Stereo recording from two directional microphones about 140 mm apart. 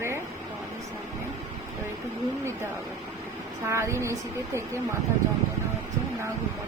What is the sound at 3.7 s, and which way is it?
Speech, 20° right (ahead or behind).